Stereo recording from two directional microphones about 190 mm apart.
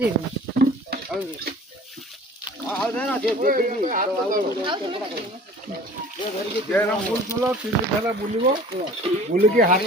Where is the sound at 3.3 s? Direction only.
45° right (ahead or behind).